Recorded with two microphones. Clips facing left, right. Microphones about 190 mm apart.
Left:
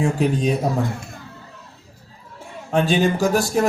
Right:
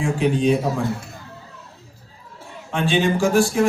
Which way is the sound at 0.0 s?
40° left (ahead or behind).